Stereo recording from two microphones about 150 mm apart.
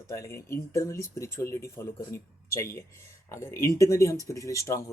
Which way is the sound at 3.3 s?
20° left (ahead or behind).